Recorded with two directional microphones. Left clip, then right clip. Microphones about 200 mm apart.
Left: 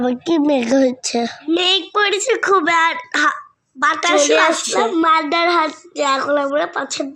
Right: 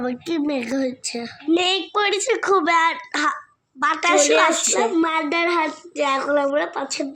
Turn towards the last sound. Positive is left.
turn(degrees=15)  # may be behind; listen again after turning